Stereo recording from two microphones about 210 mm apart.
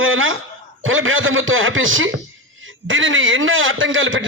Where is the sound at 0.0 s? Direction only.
70° right (ahead or behind).